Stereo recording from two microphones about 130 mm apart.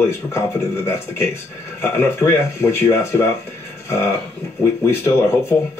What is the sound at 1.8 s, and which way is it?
Speech, 15° left (ahead or behind).